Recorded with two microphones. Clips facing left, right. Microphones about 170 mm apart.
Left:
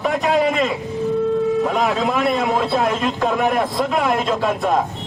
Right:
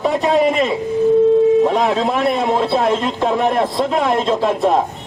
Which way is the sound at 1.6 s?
20° right (ahead or behind).